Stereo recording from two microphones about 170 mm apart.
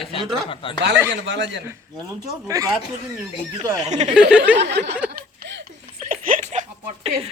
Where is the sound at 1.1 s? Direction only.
90° right.